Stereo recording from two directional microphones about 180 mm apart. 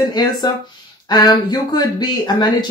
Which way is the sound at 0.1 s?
20° left (ahead or behind).